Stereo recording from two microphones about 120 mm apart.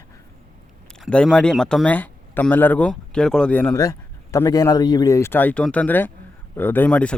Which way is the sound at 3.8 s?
25° left (ahead or behind).